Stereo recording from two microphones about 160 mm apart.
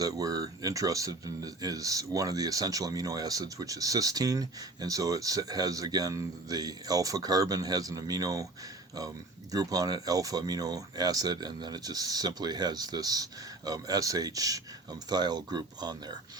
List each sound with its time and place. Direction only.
0.0 s speech: 25° right (ahead or behind)